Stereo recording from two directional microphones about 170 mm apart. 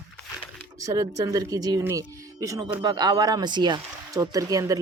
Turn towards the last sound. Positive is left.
turn(degrees=-20)  # may be behind; listen again after turning